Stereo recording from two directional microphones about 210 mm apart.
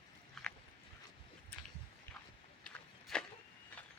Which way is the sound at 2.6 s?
5° left (ahead or behind).